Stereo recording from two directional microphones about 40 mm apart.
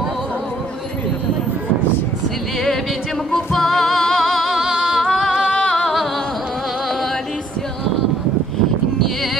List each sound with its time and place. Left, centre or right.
3.3 s music: centre
5.0 s singing: centre
5.5 s music: centre